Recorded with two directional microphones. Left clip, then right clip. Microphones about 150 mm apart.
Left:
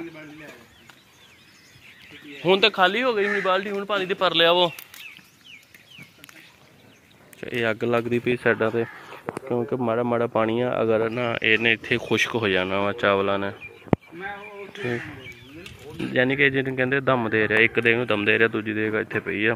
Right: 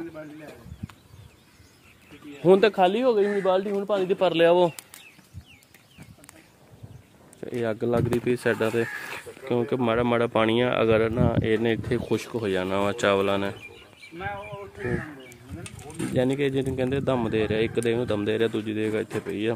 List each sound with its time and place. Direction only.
2.4 s speech: 60° right (ahead or behind)
2.8 s speech: 50° right (ahead or behind)
3.7 s speech: 10° right (ahead or behind)
4.1 s speech: 50° right (ahead or behind)
7.3 s speech: 5° right (ahead or behind); by 11.8 s 25° right (ahead or behind)
11.9 s speech: 5° right (ahead or behind)
16.1 s speech: 15° right (ahead or behind)